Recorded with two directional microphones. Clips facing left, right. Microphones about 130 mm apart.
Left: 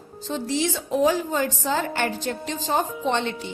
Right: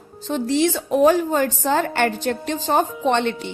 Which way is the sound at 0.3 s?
60° right (ahead or behind).